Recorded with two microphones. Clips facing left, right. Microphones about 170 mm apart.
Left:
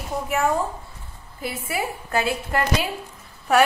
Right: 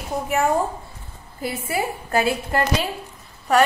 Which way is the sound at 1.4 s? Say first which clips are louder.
Right 3 dB; 40° right (ahead or behind).